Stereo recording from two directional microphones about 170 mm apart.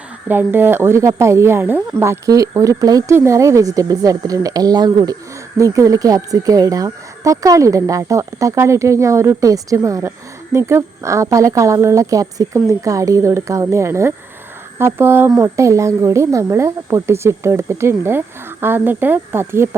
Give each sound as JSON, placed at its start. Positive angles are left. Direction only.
{"t": 0.3, "sound": "speech", "side_deg": -10}